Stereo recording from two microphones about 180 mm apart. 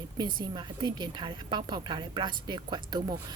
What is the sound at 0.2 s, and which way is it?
A woman's voice, 25° right (ahead or behind).